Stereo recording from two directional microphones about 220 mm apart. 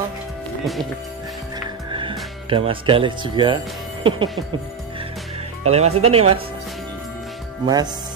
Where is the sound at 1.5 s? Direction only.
20° right (ahead or behind).